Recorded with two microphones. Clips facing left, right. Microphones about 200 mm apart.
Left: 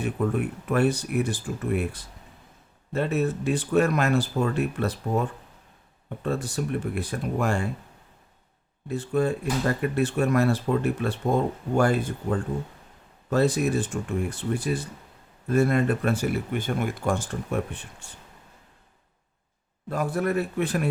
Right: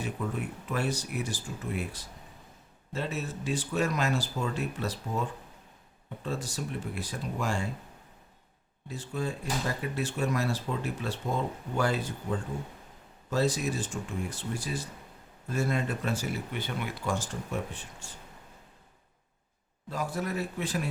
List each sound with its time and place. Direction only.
0.0 s speech: 55° left (ahead or behind)
6.2 s speech: 60° left (ahead or behind)
8.9 s speech: 60° left (ahead or behind)
19.9 s speech: 55° left (ahead or behind)